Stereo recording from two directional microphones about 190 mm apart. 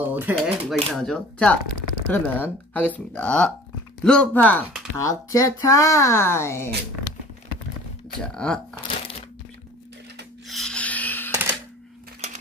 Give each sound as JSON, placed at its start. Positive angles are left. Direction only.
{"t": 0.0, "sound": "speech", "side_deg": -10}
{"t": 0.4, "sound": "speech", "side_deg": 0}
{"t": 10.5, "sound": "a sound", "side_deg": 5}